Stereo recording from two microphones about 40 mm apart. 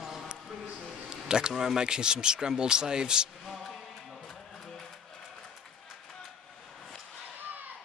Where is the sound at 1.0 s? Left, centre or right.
Centre.